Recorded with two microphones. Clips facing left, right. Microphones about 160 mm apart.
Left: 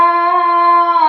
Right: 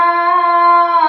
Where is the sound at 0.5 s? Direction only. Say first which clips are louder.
Right 2 dB; 20° left (ahead or behind).